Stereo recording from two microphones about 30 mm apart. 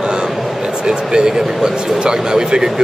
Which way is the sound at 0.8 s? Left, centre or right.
Right.